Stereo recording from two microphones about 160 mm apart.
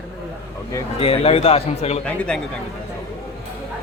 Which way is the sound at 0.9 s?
35° left (ahead or behind).